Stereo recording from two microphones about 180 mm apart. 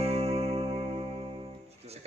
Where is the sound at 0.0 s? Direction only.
35° right (ahead or behind).